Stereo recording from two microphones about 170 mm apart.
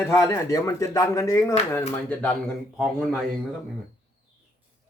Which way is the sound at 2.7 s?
5° right (ahead or behind).